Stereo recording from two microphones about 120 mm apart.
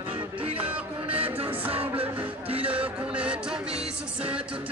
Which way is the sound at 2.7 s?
10° right (ahead or behind).